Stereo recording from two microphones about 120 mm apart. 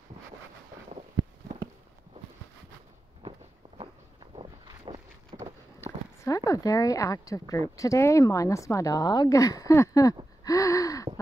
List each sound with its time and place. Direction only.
3.2 s walk: 45° right (ahead or behind)
5.3 s a sound: 55° right (ahead or behind)
6.2 s a woman's voice: 30° left (ahead or behind)
10.4 s gasp: 25° left (ahead or behind)